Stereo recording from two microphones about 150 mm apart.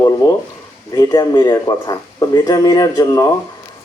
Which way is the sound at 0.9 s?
25° left (ahead or behind).